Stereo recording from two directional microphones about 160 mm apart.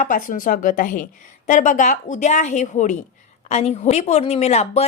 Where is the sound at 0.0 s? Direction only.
55° left (ahead or behind).